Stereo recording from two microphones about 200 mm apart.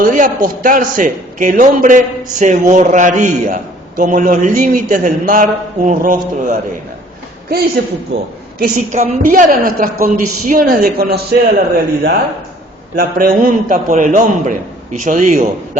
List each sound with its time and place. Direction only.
0.0 s a man's voice: 40° right (ahead or behind)
7.8 s a woman's voice: 55° right (ahead or behind)
8.5 s a woman's voice: 40° right (ahead or behind)
13.0 s a woman's voice: 45° right (ahead or behind)